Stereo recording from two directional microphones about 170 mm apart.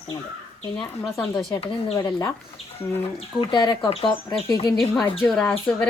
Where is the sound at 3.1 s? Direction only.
30° left (ahead or behind).